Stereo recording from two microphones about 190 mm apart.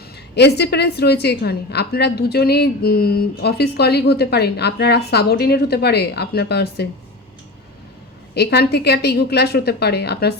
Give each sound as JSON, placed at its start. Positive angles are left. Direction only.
{"t": 0.3, "sound": "a woman's voice", "side_deg": 60}
{"t": 8.4, "sound": "a woman's voice", "side_deg": 60}